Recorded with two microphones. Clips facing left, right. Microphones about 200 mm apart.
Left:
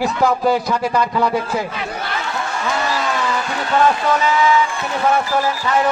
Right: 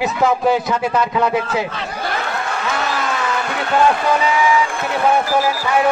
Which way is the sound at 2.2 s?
60° right (ahead or behind).